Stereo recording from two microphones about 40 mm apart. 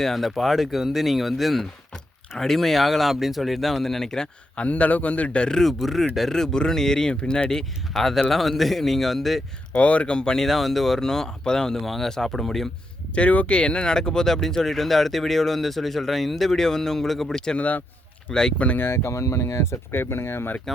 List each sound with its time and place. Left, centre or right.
0.0 s speech: centre
4.5 s a man's voice: left
5.6 s speech: centre; by 7.6 s left
7.9 s speech: centre
9.7 s a man's voice: left
10.3 s speech: centre
13.1 s speech: left; by 17.3 s centre
17.3 s speech: centre
17.6 s speech: left
18.3 s speech: centre
18.8 s speech: left
19.6 s speech: left